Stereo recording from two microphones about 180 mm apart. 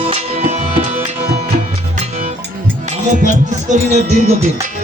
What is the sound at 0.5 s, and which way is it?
Music, 35° right (ahead or behind).